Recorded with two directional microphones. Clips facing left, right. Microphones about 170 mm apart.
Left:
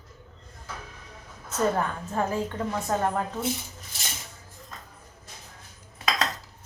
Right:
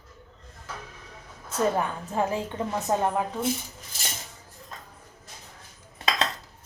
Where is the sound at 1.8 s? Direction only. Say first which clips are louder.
Right 1 dB; 15° right (ahead or behind).